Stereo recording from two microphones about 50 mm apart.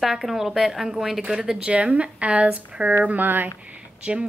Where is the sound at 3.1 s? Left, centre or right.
Right.